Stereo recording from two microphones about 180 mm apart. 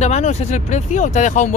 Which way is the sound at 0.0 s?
40° left (ahead or behind).